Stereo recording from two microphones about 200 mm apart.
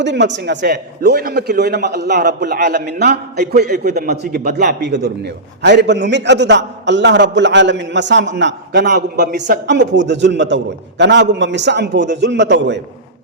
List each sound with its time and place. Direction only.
0.0 s a man's voice: 60° right (ahead or behind)